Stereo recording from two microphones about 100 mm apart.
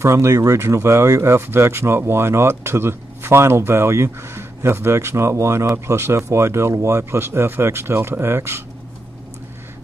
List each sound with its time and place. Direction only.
0.0 s speech: 30° right (ahead or behind)